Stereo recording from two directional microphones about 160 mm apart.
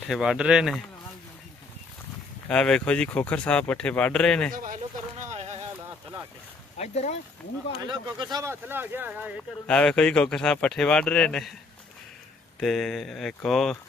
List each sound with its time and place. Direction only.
0.1 s speech: 5° right (ahead or behind)
2.4 s speech: 5° left (ahead or behind)
5.2 s boat: 45° right (ahead or behind)
6.8 s speech: 45° left (ahead or behind)
7.8 s speech: 25° right (ahead or behind)
9.7 s speech: 5° left (ahead or behind)
12.5 s speech: centre (ahead or behind)